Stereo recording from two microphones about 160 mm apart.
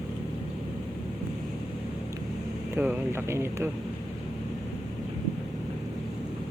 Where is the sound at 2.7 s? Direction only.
15° right (ahead or behind).